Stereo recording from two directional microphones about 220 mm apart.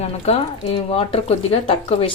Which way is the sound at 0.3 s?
25° left (ahead or behind).